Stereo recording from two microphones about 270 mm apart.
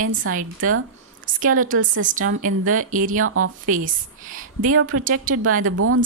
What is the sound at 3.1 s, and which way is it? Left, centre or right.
Speech, right.